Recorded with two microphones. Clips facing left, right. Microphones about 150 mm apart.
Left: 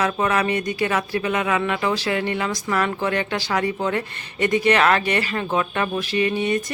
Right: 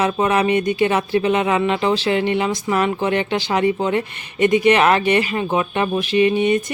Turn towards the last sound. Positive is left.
turn(degrees=-20)  # may be behind; listen again after turning